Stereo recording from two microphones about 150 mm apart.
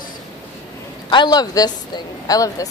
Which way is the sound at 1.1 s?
30° left (ahead or behind).